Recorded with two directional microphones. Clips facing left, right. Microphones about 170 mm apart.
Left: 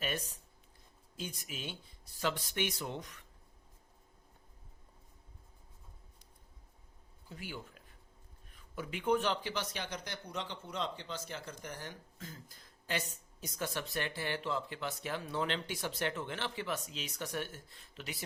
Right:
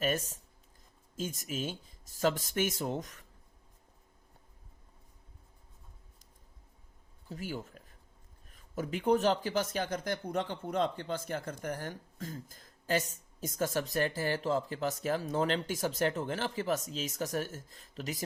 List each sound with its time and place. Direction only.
0.0 s speech: 45° right (ahead or behind)
7.3 s speech: 40° right (ahead or behind)